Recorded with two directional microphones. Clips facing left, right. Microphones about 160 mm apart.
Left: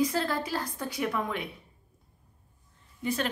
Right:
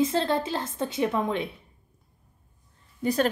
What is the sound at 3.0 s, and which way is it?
Speech, 40° right (ahead or behind).